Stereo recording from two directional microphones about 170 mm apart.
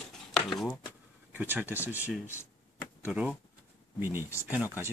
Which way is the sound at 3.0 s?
10° right (ahead or behind).